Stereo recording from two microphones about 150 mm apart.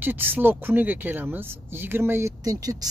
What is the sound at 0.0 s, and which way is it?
Speech, 15° right (ahead or behind).